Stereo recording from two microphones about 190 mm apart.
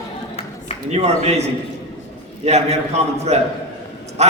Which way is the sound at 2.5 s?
35° right (ahead or behind).